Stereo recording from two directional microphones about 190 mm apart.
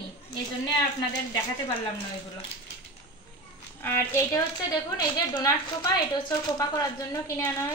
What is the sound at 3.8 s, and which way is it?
A woman's voice, 15° left (ahead or behind).